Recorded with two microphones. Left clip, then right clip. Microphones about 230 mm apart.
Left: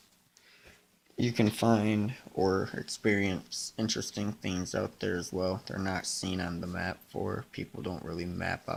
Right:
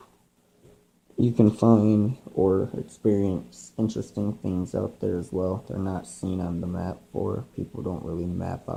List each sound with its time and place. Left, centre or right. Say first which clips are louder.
1.1 s speech: right 7 dB; left